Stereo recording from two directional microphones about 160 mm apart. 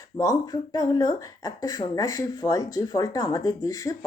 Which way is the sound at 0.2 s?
25° left (ahead or behind).